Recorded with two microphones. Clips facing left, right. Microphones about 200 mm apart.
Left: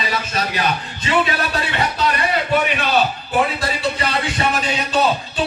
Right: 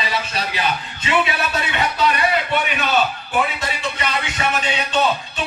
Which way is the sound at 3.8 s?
35° left (ahead or behind).